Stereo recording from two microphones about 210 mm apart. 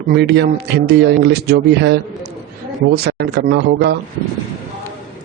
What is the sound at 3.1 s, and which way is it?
Speech, 50° right (ahead or behind).